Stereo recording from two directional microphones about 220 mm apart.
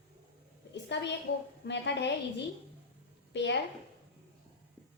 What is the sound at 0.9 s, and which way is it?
A woman's voice, 50° left (ahead or behind).